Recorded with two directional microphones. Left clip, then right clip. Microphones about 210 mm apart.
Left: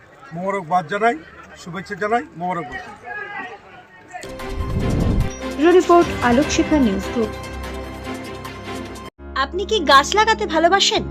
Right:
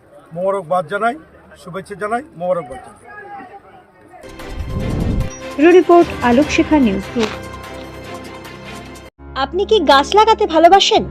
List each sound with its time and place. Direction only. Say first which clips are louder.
0.4 s speech: right 3 dB; 30° right (ahead or behind)
4.4 s music: right 1 dB; centre (ahead or behind)